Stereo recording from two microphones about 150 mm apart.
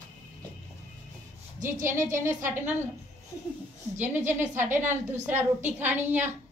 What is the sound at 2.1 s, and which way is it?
Speech, 20° right (ahead or behind).